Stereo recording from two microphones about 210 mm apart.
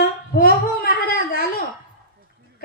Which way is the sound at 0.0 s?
45° left (ahead or behind).